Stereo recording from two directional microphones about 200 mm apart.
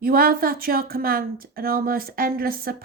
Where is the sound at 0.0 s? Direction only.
45° right (ahead or behind).